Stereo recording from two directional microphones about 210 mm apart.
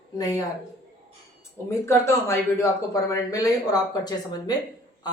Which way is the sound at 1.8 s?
15° left (ahead or behind).